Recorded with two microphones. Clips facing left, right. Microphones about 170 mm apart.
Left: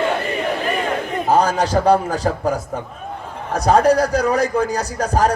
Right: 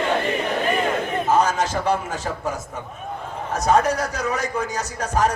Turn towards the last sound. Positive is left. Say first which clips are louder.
# left 4 dB
turn(degrees=35)  # may be behind; listen again after turning